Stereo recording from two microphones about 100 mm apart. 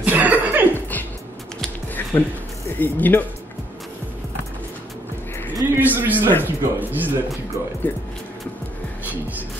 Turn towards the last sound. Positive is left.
turn(degrees=30)  # may be behind; listen again after turning